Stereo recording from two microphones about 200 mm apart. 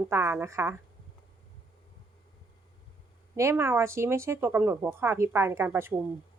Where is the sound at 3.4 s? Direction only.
15° right (ahead or behind).